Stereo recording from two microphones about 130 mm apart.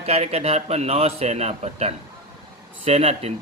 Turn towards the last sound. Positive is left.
turn(degrees=-55)  # may be behind; listen again after turning